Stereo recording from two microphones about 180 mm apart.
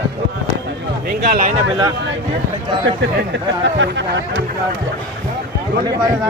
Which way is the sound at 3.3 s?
85° right.